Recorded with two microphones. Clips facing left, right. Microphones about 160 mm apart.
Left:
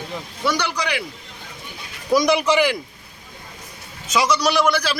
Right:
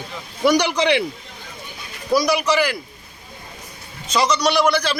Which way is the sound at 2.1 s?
20° left (ahead or behind).